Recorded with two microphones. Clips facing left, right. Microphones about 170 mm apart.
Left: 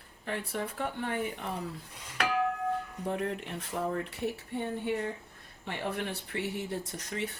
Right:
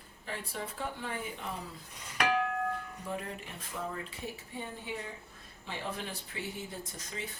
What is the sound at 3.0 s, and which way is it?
Speech, 65° left (ahead or behind).